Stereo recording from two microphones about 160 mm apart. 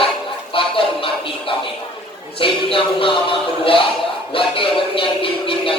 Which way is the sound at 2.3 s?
35° left (ahead or behind).